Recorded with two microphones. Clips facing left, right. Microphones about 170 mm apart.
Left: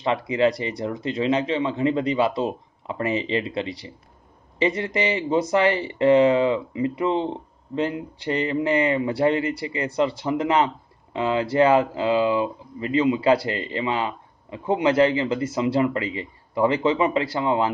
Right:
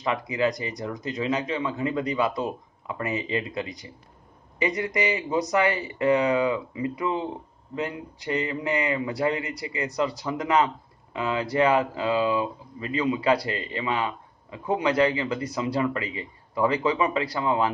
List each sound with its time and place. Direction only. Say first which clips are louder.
0.0 s speech: left 4 dB; 30° left (ahead or behind)